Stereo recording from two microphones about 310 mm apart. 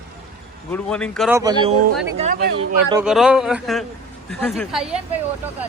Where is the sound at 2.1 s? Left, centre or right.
Right.